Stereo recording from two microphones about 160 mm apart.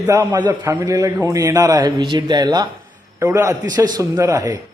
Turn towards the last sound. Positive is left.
turn(degrees=-20)  # may be behind; listen again after turning